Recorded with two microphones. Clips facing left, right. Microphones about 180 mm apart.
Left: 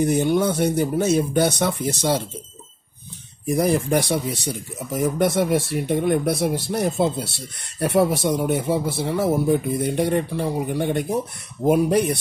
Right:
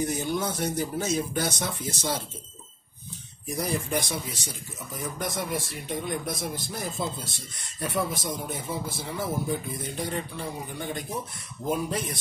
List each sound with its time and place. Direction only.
0.0 s speech: 65° left (ahead or behind)
3.4 s speech: 65° left (ahead or behind)